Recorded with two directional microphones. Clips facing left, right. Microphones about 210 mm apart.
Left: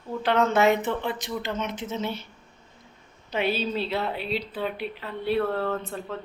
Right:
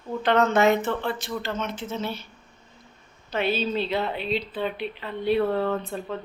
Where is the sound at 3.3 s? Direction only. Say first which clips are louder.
Right 1 dB; 10° left (ahead or behind).